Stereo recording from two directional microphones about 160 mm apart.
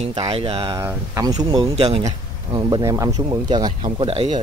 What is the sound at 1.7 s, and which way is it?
Speech, 40° right (ahead or behind).